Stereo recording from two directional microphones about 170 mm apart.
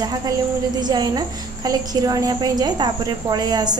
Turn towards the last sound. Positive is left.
turn(degrees=-25)  # may be behind; listen again after turning